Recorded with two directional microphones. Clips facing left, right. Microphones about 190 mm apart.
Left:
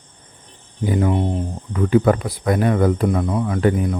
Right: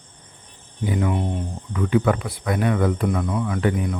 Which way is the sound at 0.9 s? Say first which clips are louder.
Left 4 dB; 35° left (ahead or behind).